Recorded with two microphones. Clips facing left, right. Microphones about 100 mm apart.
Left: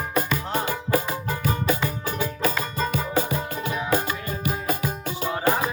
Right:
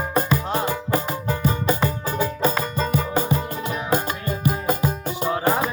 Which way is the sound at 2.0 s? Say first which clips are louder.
Right 3 dB; 25° right (ahead or behind).